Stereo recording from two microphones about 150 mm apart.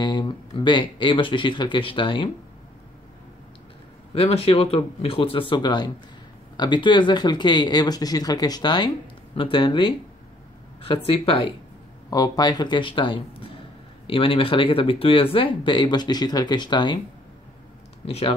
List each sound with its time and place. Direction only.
0.0 s speech: 30° left (ahead or behind)
4.1 s speech: 40° left (ahead or behind)
12.1 s speech: 25° left (ahead or behind)
18.0 s speech: 40° left (ahead or behind)